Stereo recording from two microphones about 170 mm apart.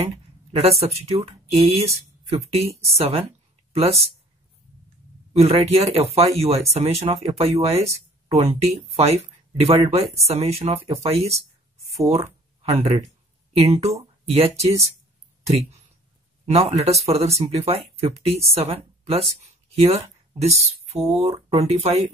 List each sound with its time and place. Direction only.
0.6 s speech: 35° right (ahead or behind)
5.4 s speech: 35° right (ahead or behind)
12.6 s speech: 35° right (ahead or behind)